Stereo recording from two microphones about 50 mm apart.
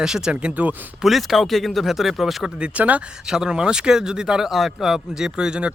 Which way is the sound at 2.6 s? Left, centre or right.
Right.